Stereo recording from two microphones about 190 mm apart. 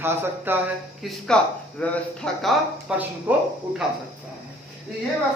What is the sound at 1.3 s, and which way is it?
Speech, 5° left (ahead or behind).